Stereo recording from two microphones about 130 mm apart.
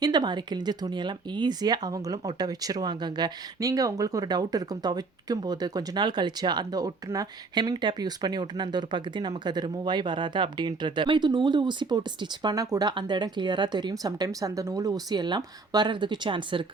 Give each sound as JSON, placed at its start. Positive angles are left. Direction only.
{"t": 0.0, "sound": "speech", "side_deg": -35}